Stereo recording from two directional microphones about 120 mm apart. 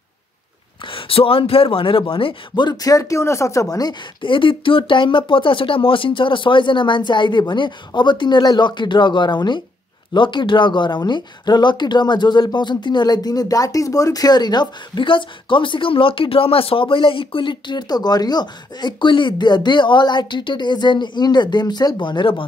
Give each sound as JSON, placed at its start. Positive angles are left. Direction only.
{"t": 0.8, "sound": "speech", "side_deg": 50}
{"t": 4.2, "sound": "speech", "side_deg": 45}